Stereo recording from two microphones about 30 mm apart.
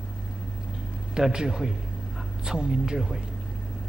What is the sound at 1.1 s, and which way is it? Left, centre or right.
A man's voice, right.